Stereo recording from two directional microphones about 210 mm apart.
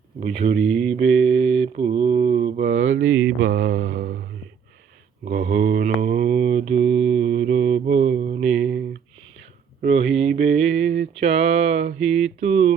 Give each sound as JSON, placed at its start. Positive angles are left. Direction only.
{"t": 0.2, "sound": "mantra", "side_deg": -35}
{"t": 0.6, "sound": "mantra", "side_deg": 0}
{"t": 0.9, "sound": "mantra", "side_deg": -30}
{"t": 2.6, "sound": "a sound", "side_deg": -60}
{"t": 3.4, "sound": "mantra", "side_deg": -45}
{"t": 3.8, "sound": "a sound", "side_deg": -45}
{"t": 5.2, "sound": "mantra", "side_deg": -40}
{"t": 5.5, "sound": "mantra", "side_deg": -55}
{"t": 5.8, "sound": "mantra", "side_deg": -40}
{"t": 8.6, "sound": "a sound", "side_deg": -45}
{"t": 9.8, "sound": "mantra", "side_deg": -30}
{"t": 11.2, "sound": "a sound", "side_deg": -30}
{"t": 12.4, "sound": "mantra", "side_deg": -35}